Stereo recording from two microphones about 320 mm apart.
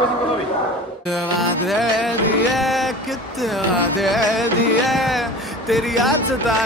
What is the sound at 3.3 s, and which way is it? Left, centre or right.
Music, centre.